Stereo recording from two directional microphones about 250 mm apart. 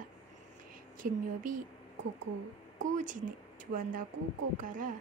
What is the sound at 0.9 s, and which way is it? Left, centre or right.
Speech, right.